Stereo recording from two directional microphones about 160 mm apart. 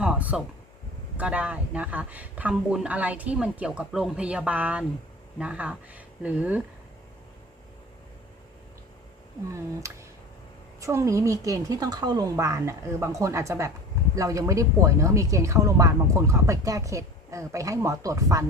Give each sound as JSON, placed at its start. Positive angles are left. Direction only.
{"t": 0.0, "sound": "a sound", "side_deg": -5}
{"t": 1.1, "sound": "speech", "side_deg": -10}
{"t": 9.8, "sound": "speech", "side_deg": -20}